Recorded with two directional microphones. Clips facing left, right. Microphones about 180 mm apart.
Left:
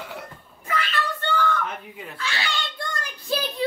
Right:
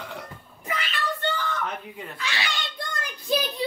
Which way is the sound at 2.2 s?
15° right (ahead or behind).